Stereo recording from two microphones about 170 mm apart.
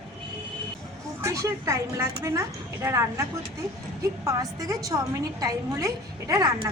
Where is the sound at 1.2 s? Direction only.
15° right (ahead or behind).